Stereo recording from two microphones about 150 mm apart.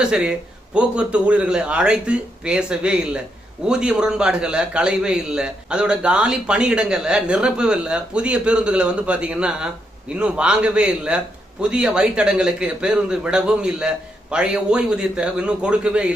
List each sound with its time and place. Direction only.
0.0 s a man's voice: 5° right (ahead or behind)